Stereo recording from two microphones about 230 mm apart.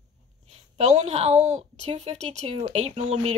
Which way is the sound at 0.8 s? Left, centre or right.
Right.